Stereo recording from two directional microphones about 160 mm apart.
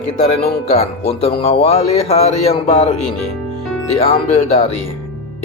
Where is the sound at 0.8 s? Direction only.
40° left (ahead or behind).